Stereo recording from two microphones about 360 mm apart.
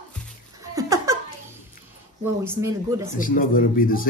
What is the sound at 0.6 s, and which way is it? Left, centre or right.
Giggle, centre.